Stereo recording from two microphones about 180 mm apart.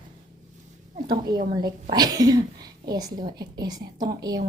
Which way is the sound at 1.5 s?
25° right (ahead or behind).